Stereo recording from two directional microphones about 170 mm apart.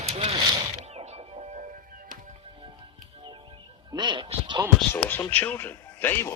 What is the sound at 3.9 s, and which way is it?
Speech, 25° right (ahead or behind).